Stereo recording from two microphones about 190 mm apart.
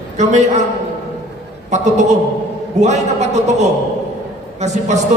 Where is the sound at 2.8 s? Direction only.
35° right (ahead or behind).